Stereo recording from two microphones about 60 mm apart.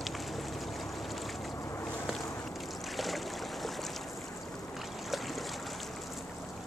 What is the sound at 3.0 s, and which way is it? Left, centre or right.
Boat, centre.